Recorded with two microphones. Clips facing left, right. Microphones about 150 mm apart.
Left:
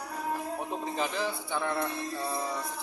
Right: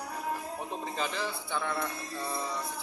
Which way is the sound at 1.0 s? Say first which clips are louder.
Left 2 dB; 15° left (ahead or behind).